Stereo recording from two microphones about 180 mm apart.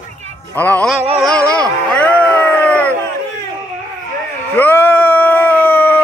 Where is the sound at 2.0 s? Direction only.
5° left (ahead or behind).